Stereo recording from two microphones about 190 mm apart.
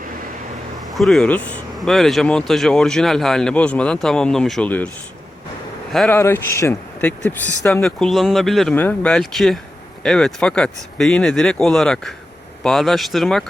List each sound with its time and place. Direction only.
0.9 s speech: centre (ahead or behind)
5.9 s speech: centre (ahead or behind)
6.1 s speech: 15° left (ahead or behind)